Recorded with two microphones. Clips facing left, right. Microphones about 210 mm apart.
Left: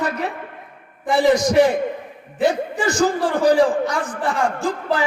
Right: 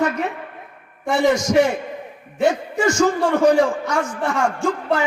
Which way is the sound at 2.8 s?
35° left (ahead or behind).